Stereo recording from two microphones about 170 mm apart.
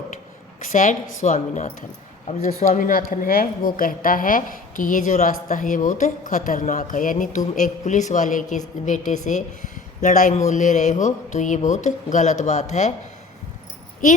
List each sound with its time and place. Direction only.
0.6 s speech: 50° left (ahead or behind)